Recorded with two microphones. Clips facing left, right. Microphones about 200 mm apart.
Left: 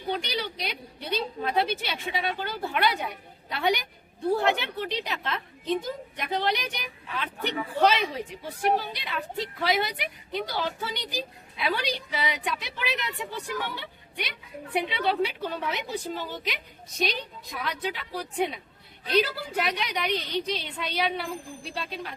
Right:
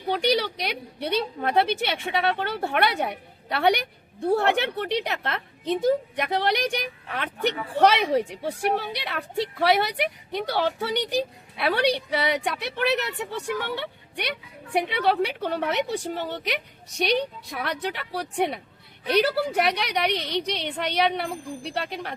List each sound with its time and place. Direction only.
0.1 s a woman's voice: 65° right (ahead or behind)